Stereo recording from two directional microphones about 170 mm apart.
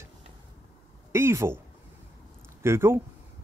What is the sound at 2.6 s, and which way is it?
Speech, 15° right (ahead or behind).